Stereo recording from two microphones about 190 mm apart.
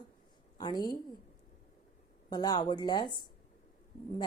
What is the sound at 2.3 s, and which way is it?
Speech, 20° left (ahead or behind).